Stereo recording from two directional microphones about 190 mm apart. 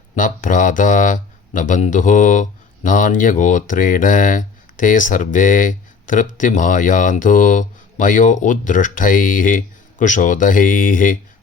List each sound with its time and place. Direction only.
0.2 s speech: 45° left (ahead or behind)